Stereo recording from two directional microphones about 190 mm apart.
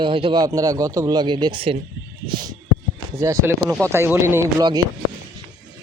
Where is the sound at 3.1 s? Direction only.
15° right (ahead or behind).